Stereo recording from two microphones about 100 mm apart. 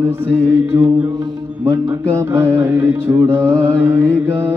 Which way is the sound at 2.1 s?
25° right (ahead or behind).